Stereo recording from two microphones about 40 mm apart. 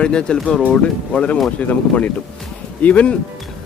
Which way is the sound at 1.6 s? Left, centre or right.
Left.